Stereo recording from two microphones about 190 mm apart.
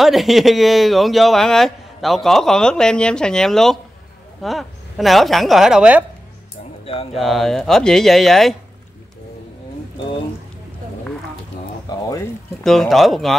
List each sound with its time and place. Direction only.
0.0 s speech: centre (ahead or behind)
7.2 s speech: centre (ahead or behind)
11.9 s a sound: 15° left (ahead or behind)
12.6 s speech: centre (ahead or behind)